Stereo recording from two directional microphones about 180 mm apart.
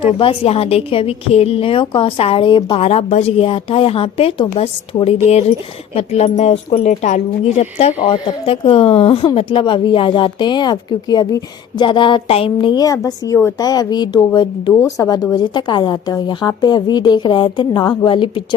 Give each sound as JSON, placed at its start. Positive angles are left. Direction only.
{"t": 0.0, "sound": "a woman's voice", "side_deg": 30}
{"t": 2.8, "sound": "a woman's voice", "side_deg": 35}